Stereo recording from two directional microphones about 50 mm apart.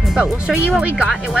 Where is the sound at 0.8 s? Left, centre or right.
Right.